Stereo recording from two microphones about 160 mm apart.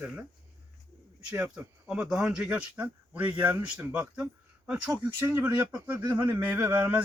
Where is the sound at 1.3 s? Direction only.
5° right (ahead or behind).